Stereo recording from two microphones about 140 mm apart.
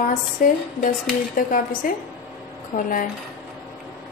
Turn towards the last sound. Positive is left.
turn(degrees=80)